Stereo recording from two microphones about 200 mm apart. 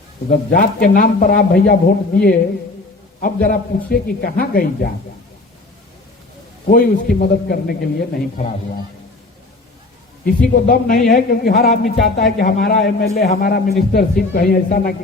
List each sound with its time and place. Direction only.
0.3 s speech: 45° left (ahead or behind)
6.7 s speech: 45° left (ahead or behind)
10.2 s speech: 45° left (ahead or behind)